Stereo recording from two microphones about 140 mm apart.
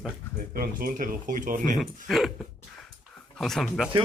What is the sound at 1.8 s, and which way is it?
Speech, centre (ahead or behind).